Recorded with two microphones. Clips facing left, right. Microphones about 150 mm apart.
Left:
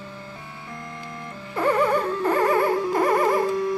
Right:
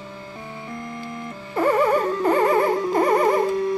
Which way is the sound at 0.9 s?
5° right (ahead or behind).